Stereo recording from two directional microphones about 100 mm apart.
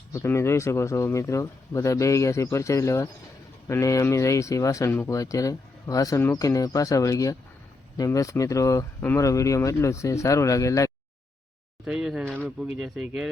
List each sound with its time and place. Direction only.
0.1 s speech: 25° left (ahead or behind)
11.9 s speech: 5° right (ahead or behind)